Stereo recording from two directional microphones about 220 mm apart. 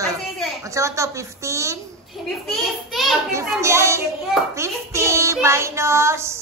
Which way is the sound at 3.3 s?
15° right (ahead or behind).